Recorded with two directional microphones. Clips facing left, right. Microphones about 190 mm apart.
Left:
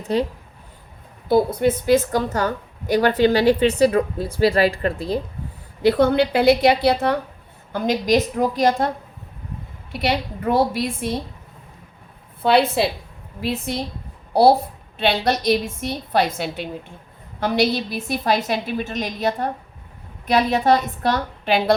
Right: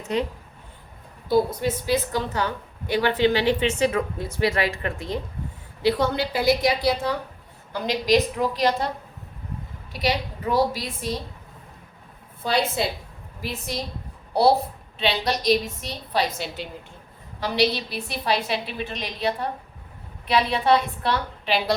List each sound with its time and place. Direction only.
0.0 s speech: 35° left (ahead or behind)
1.3 s a woman's voice: 55° left (ahead or behind); by 5.2 s 35° left (ahead or behind)
5.8 s a woman's voice: 55° left (ahead or behind)
7.7 s a woman's voice: 50° left (ahead or behind)
9.9 s a woman's voice: 60° left (ahead or behind)
12.4 s a woman's voice: 60° left (ahead or behind)
14.9 s a woman's voice: 50° left (ahead or behind)